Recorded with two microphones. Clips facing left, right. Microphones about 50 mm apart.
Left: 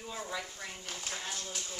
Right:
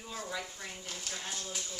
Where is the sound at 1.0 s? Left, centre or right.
Left.